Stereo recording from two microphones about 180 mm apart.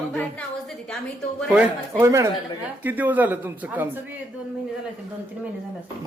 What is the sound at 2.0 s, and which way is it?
A man's voice, 15° right (ahead or behind).